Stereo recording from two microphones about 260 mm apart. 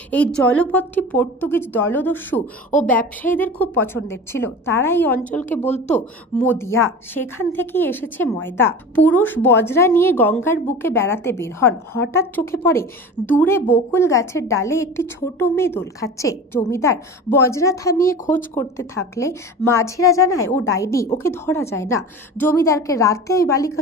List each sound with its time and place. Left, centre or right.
0.1 s a woman's voice: centre
5.7 s speech: left
6.3 s a woman's voice: centre
20.3 s a woman's voice: left
20.6 s a woman's voice: centre